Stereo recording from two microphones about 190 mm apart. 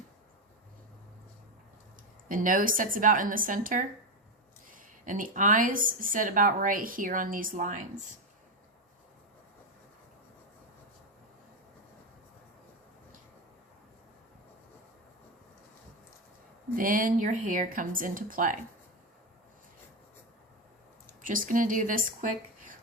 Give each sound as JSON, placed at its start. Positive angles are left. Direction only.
{"t": 2.3, "sound": "a woman's voice", "side_deg": -45}
{"t": 16.7, "sound": "a woman's voice", "side_deg": -45}
{"t": 21.2, "sound": "speech", "side_deg": -45}